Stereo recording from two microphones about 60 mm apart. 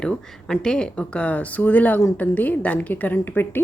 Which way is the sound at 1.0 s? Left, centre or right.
Left.